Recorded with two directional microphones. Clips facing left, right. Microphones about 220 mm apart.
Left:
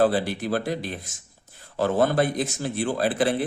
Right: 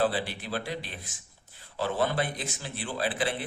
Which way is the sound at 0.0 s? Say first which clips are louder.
Left 7 dB; 45° left (ahead or behind).